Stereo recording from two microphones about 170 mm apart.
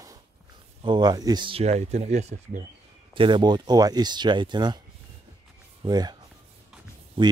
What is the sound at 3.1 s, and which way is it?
A man's voice, 30° right (ahead or behind).